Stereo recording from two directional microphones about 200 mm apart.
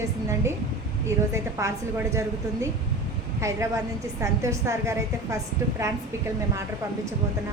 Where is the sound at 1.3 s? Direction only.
15° right (ahead or behind).